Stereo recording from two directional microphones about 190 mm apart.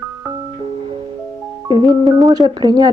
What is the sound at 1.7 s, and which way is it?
Speech, 20° right (ahead or behind).